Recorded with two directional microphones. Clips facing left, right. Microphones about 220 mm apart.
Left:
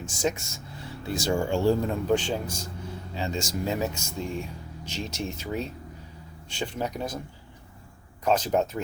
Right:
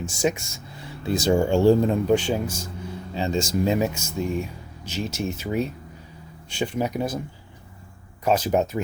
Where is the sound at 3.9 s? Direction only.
5° right (ahead or behind).